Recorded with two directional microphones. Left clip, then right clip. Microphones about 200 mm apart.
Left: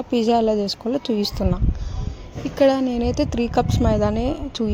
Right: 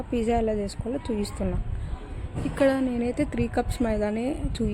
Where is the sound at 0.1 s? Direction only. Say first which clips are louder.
Left 7 dB; 30° left (ahead or behind).